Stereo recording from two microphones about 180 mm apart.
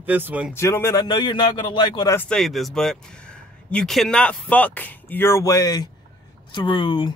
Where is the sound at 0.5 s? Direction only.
15° left (ahead or behind).